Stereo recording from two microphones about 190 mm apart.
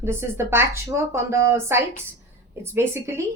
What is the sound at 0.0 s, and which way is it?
A woman's voice, 15° right (ahead or behind).